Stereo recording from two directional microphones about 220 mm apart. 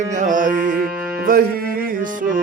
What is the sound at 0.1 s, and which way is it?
Music, 35° right (ahead or behind).